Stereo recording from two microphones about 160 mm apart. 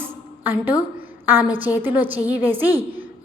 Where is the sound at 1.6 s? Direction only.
10° right (ahead or behind).